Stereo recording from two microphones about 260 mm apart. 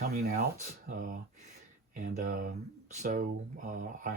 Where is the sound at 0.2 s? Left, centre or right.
Right.